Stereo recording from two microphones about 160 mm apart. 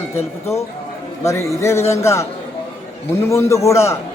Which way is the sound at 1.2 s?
20° left (ahead or behind).